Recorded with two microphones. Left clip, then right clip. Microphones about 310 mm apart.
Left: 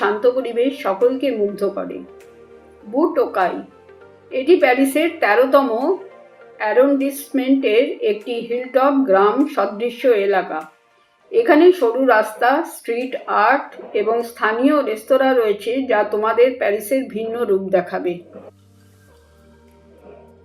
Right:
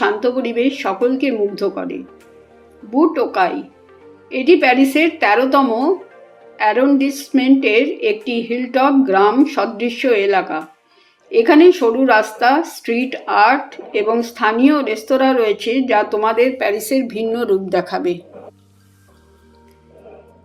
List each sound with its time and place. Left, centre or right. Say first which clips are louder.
0.0 s a woman's voice: even; right
2.9 s a woman's voice: right 2 dB; right